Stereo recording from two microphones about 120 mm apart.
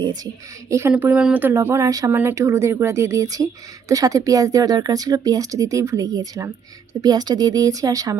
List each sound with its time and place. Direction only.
0.7 s speech: 20° right (ahead or behind)